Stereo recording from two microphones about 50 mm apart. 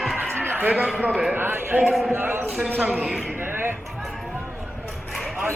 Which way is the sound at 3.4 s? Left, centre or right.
Right.